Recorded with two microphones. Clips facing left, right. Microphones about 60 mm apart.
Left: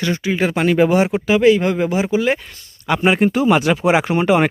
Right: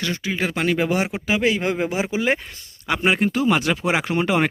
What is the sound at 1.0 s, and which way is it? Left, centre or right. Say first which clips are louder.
Speech: left 7 dB; centre.